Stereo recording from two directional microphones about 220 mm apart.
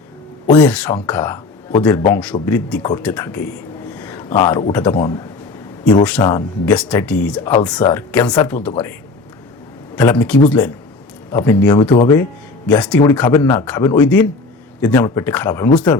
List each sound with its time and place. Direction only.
0.5 s speech: 5° left (ahead or behind)
5.8 s speech: 5° left (ahead or behind)
6.2 s speech: 15° left (ahead or behind)
6.7 s speech: 5° left (ahead or behind)
9.9 s speech: 10° left (ahead or behind)
12.6 s speech: 5° left (ahead or behind)